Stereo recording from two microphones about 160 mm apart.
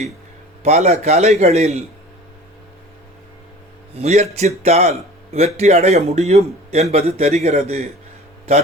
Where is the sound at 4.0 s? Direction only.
40° right (ahead or behind).